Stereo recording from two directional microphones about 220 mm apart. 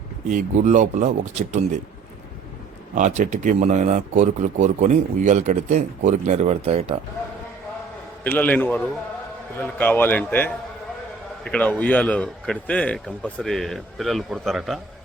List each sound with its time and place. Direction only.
0.3 s speech: 35° right (ahead or behind)
3.2 s speech: 35° right (ahead or behind)
8.2 s a man's voice: 5° left (ahead or behind)